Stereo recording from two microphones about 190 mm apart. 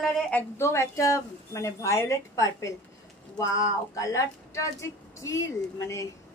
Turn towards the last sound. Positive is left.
turn(degrees=15)  # may be behind; listen again after turning